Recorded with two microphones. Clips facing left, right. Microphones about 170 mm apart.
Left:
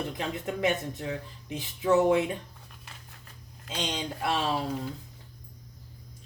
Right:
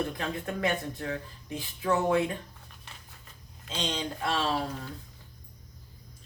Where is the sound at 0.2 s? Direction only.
20° left (ahead or behind).